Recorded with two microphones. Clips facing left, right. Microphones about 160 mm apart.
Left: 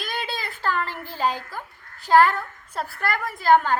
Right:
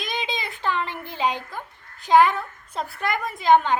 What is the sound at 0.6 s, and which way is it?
Speech, 20° right (ahead or behind).